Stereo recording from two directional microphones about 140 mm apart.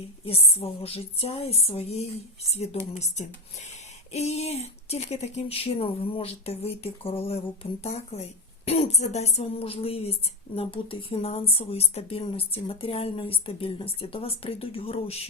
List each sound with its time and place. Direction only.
0.3 s speech: 45° left (ahead or behind)